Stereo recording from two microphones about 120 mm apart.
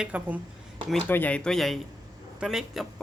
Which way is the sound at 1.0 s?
15° left (ahead or behind).